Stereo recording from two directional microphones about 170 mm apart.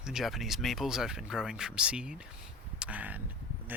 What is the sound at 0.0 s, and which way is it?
Speech, 5° right (ahead or behind).